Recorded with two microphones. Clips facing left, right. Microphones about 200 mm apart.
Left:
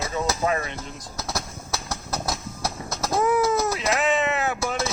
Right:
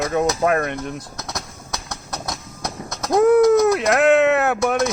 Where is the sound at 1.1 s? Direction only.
Centre (ahead or behind).